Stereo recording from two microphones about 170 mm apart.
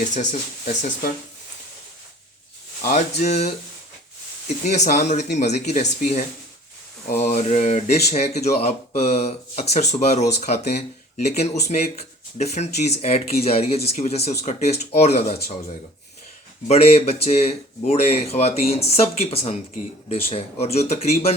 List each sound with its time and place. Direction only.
0.1 s speech: 45° left (ahead or behind)
2.8 s speech: 45° left (ahead or behind)
16.6 s speech: 40° left (ahead or behind)